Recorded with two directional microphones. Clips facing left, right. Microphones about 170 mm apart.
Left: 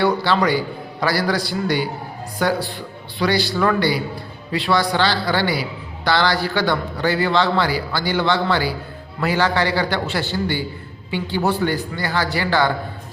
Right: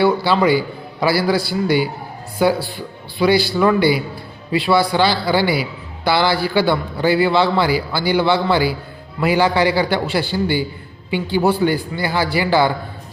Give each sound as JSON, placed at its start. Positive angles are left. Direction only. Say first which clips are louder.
{"t": 0.0, "sound": "a man's voice", "louder": "right 3 dB", "side_deg": -10}